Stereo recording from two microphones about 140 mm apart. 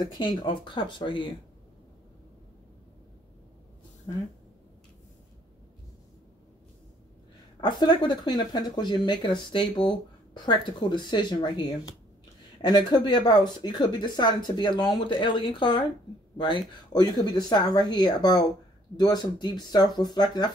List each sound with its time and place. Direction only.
0.0 s speech: 35° left (ahead or behind)
4.1 s speech: 30° left (ahead or behind)
7.6 s speech: 30° left (ahead or behind)